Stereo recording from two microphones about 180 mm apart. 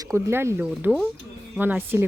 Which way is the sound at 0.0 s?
15° right (ahead or behind).